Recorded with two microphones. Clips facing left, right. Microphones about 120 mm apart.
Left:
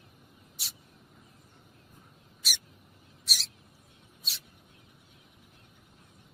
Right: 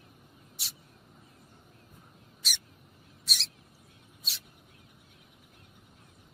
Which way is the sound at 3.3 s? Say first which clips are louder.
Even; centre (ahead or behind).